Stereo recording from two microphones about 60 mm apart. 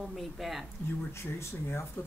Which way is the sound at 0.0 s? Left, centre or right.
Centre.